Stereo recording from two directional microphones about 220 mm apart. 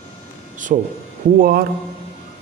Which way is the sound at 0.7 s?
35° right (ahead or behind).